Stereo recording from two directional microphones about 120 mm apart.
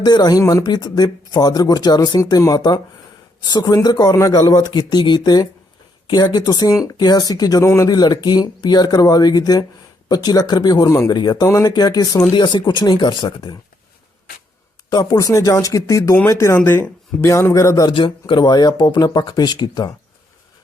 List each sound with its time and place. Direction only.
0.0 s speech: 35° left (ahead or behind)
14.8 s speech: 35° left (ahead or behind)
17.9 s speech: 40° left (ahead or behind)